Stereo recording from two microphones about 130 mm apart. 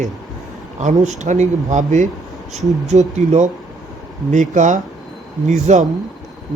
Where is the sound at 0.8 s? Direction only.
65° right (ahead or behind).